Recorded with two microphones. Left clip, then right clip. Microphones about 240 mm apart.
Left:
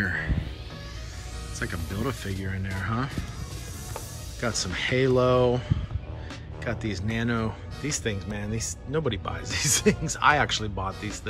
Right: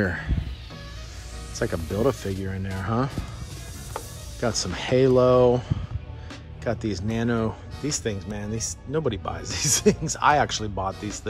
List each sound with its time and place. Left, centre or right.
0.0 s speech: centre
1.6 s speech: centre
3.9 s music: centre
4.7 s speech: centre
10.9 s speech: centre